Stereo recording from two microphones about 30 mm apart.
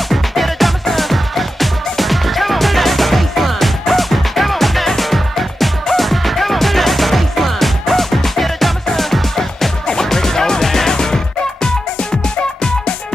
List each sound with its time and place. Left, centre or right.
0.1 s music: centre